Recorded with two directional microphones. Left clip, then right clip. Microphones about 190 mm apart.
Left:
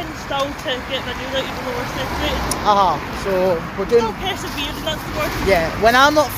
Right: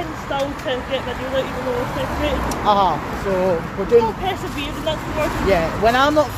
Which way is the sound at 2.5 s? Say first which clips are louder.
Left 1 dB; 15° left (ahead or behind).